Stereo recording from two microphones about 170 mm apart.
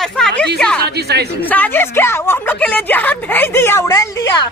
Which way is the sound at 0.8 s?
75° right (ahead or behind).